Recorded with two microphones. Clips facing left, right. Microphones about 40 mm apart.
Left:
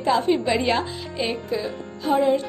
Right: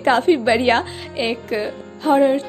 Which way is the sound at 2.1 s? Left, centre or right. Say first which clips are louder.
Right 5 dB; right.